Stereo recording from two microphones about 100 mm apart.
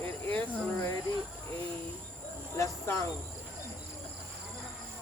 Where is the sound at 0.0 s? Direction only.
15° left (ahead or behind).